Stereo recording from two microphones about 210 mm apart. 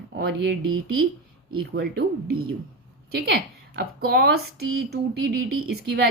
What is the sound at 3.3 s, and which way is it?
Speech, 45° right (ahead or behind).